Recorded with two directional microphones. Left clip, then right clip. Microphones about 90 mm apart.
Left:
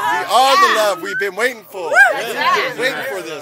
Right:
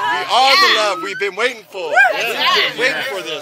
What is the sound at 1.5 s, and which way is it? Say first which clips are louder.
Speech: left 1 dB; 35° left (ahead or behind).